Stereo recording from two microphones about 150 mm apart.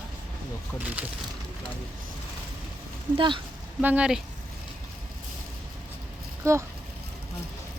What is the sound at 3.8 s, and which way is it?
Speech, 10° right (ahead or behind).